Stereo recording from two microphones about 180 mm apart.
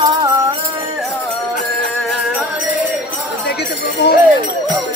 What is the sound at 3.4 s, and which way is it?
Jingle bell, 70° left (ahead or behind).